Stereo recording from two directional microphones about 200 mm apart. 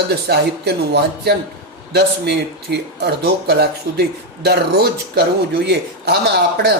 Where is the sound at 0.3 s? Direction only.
50° right (ahead or behind).